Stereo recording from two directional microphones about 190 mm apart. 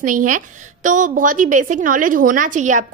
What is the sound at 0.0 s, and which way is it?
A woman's voice, 45° right (ahead or behind).